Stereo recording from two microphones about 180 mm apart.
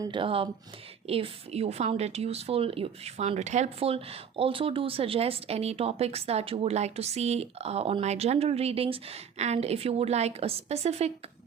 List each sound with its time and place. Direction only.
0.0 s a woman's voice: 25° right (ahead or behind)